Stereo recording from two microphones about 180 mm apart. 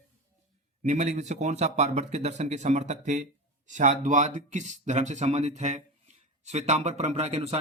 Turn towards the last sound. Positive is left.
turn(degrees=-35)  # may be behind; listen again after turning